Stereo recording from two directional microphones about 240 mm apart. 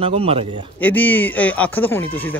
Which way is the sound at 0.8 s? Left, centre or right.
Centre.